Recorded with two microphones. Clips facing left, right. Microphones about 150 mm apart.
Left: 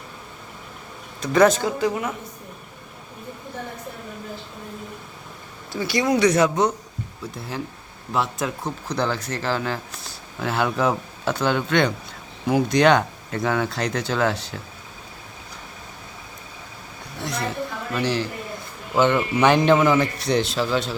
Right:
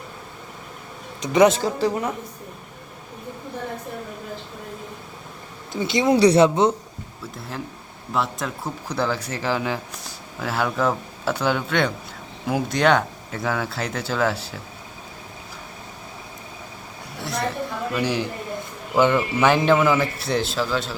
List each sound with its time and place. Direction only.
1.2 s speech: 20° right (ahead or behind)
5.7 s speech: 20° right (ahead or behind)
7.3 s speech: centre (ahead or behind)
17.9 s speech: 10° right (ahead or behind)